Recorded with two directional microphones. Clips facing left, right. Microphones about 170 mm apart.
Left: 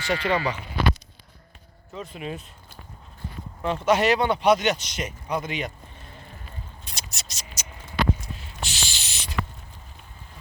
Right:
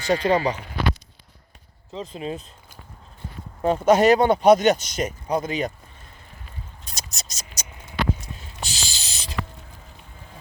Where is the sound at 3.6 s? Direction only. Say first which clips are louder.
Right 5 dB; 40° right (ahead or behind).